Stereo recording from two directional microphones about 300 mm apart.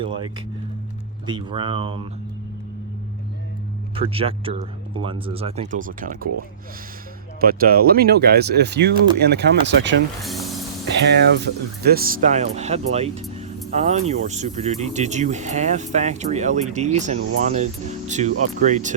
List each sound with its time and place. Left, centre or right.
1.3 s speech: centre
3.9 s speech: centre
7.4 s speech: right
10.2 s music: centre
10.8 s speech: right